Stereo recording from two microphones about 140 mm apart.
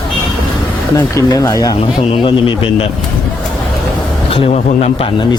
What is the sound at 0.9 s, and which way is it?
Speech, 25° left (ahead or behind).